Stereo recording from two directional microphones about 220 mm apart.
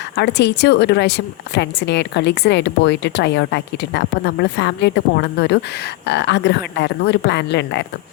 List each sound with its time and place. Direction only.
0.2 s a woman's voice: 50° left (ahead or behind)